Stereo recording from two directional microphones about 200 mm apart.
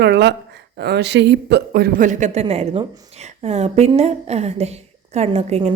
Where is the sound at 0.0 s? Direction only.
60° right (ahead or behind).